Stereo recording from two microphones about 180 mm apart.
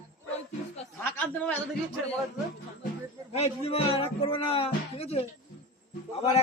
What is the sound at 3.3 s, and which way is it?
Speech, 35° left (ahead or behind).